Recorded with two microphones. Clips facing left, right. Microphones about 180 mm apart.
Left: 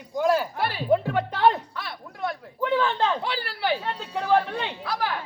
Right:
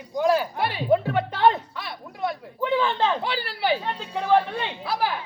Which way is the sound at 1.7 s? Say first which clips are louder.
Right 1 dB; centre (ahead or behind).